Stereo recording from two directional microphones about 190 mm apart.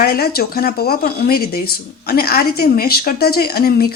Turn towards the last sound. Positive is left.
turn(degrees=55)  # may be behind; listen again after turning